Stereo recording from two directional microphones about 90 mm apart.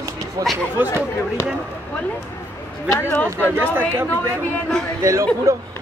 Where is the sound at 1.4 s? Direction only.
30° left (ahead or behind).